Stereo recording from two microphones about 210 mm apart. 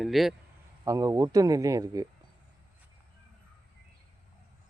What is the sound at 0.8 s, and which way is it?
Speech, 15° right (ahead or behind).